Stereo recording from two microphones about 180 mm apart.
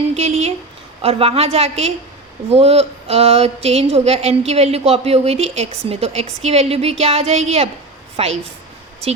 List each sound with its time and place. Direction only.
0.1 s a woman's voice: 35° right (ahead or behind)